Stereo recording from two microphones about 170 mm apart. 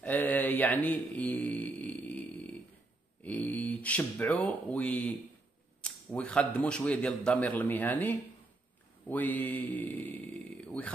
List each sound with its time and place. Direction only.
0.0 s mantra: 10° left (ahead or behind)
3.3 s speech: 10° left (ahead or behind)